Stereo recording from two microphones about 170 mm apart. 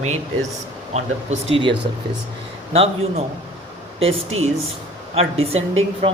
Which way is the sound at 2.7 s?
35° right (ahead or behind).